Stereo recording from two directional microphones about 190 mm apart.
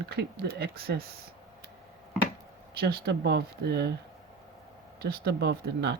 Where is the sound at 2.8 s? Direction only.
60° right (ahead or behind).